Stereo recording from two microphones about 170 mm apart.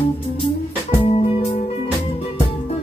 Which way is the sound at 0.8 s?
35° left (ahead or behind).